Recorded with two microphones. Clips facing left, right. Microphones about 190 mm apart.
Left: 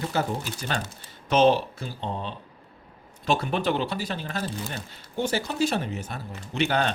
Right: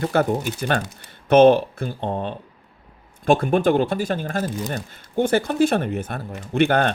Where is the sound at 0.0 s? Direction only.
60° right (ahead or behind).